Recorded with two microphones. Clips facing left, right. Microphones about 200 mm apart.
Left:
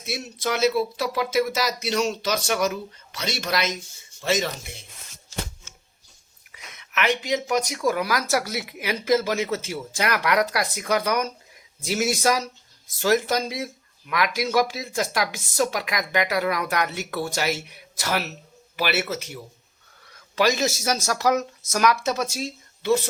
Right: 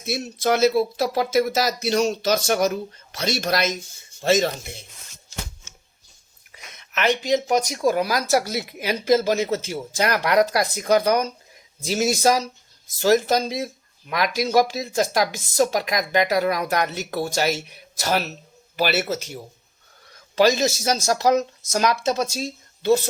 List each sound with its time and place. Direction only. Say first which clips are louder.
0.1 s speech: right 5 dB; 45° right (ahead or behind)
6.5 s speech: even; 35° right (ahead or behind)
18.8 s speech: right 3 dB; 40° right (ahead or behind)